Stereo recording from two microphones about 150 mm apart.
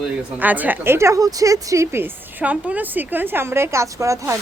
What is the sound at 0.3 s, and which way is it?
Speech, 10° right (ahead or behind).